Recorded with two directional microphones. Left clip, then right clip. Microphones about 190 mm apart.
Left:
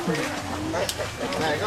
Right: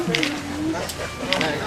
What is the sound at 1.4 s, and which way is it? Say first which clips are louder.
Speech: right 1 dB; centre (ahead or behind).